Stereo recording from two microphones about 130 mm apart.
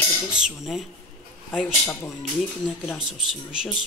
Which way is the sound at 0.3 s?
5° right (ahead or behind).